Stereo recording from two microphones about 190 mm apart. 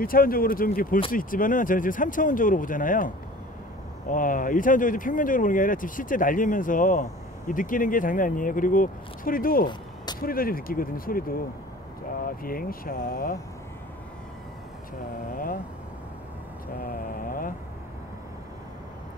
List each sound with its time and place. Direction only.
0.0 s speech: 50° left (ahead or behind)
4.1 s speech: 45° left (ahead or behind)
15.3 s speech: 50° left (ahead or behind)
16.8 s mantra: 50° left (ahead or behind)